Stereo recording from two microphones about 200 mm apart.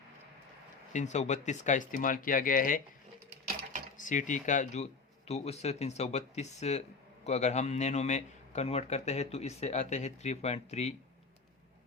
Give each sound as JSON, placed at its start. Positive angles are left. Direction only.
{"t": 0.9, "sound": "a man's voice", "side_deg": 35}
{"t": 3.9, "sound": "a man's voice", "side_deg": 40}